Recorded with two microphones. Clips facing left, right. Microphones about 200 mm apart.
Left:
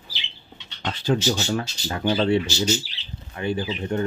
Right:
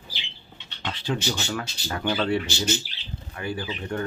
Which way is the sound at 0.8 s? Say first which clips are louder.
Left 6 dB; 40° left (ahead or behind).